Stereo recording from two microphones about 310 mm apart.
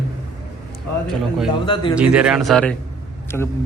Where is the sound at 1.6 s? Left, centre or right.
Centre.